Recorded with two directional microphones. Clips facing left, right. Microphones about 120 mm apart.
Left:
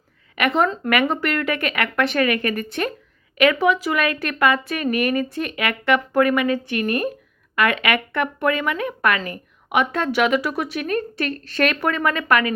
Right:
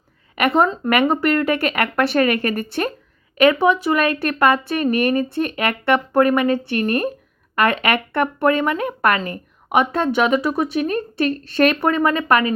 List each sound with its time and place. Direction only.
0.3 s speech: 35° right (ahead or behind)